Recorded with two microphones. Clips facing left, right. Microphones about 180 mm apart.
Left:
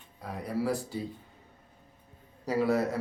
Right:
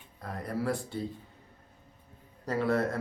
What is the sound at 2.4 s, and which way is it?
Speech, 10° left (ahead or behind).